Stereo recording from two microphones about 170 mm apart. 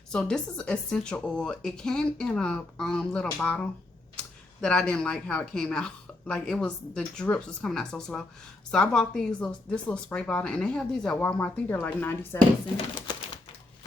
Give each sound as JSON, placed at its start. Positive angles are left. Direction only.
{"t": 0.1, "sound": "speech", "side_deg": 5}
{"t": 4.6, "sound": "speech", "side_deg": 5}
{"t": 12.7, "sound": "crumpling", "side_deg": 30}